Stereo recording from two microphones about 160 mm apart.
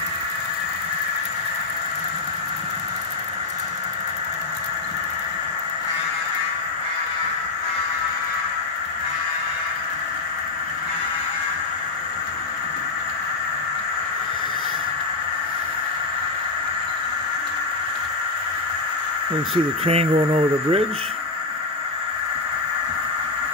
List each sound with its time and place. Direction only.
19.8 s speech: 40° right (ahead or behind)